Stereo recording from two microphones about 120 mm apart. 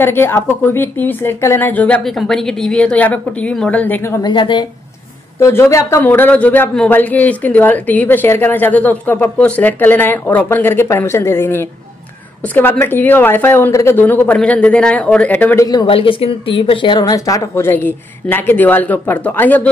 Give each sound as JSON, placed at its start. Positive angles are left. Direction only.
{"t": 0.0, "sound": "speech", "side_deg": 20}
{"t": 2.0, "sound": "speech", "side_deg": 5}
{"t": 4.2, "sound": "a woman's voice", "side_deg": 40}
{"t": 5.4, "sound": "a woman's voice", "side_deg": 20}
{"t": 6.0, "sound": "speech", "side_deg": 15}
{"t": 15.6, "sound": "a woman's voice", "side_deg": 35}
{"t": 15.9, "sound": "speech", "side_deg": 50}
{"t": 17.0, "sound": "a woman's voice", "side_deg": 30}
{"t": 17.6, "sound": "speech", "side_deg": 20}